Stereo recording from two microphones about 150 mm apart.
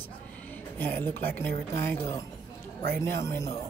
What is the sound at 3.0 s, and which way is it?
Speech, 15° left (ahead or behind).